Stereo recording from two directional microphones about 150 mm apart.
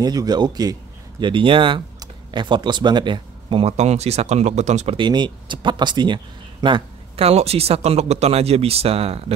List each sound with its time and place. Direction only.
0.0 s a man's voice: 25° right (ahead or behind); by 4.9 s 50° right (ahead or behind)
4.9 s speech: 30° right (ahead or behind)